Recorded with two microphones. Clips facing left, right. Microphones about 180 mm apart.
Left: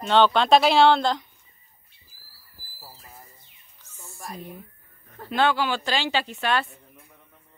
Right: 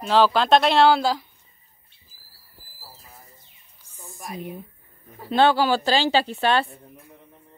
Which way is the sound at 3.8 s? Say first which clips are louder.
Right 1 dB; 15° right (ahead or behind).